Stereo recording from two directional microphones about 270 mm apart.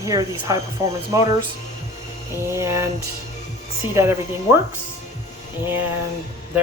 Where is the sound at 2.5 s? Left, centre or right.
Centre.